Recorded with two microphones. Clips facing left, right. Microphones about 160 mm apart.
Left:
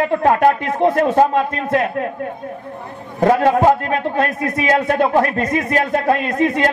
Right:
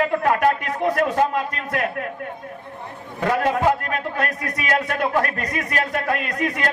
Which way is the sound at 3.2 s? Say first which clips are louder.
Left 7 dB; 30° left (ahead or behind).